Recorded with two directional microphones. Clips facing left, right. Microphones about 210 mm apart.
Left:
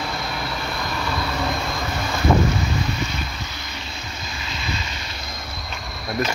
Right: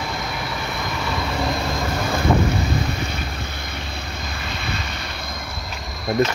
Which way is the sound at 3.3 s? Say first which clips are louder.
Right 3 dB; 55° right (ahead or behind).